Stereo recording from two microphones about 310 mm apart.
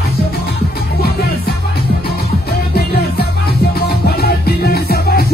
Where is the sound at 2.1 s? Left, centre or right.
Left.